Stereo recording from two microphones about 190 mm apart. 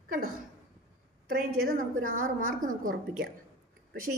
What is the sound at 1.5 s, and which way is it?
A woman's voice, 50° right (ahead or behind).